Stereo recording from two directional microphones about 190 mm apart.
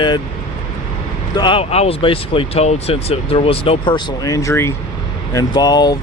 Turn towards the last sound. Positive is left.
turn(degrees=20)  # may be behind; listen again after turning